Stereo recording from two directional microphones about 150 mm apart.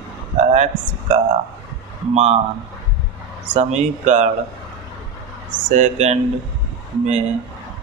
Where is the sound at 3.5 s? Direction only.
50° right (ahead or behind).